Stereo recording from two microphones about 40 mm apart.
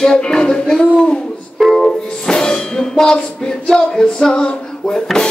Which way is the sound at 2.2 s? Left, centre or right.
Centre.